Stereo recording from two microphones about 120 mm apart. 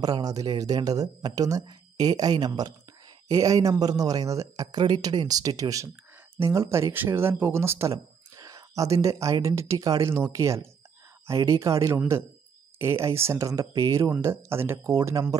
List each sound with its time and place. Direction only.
0.0 s speech: 30° right (ahead or behind)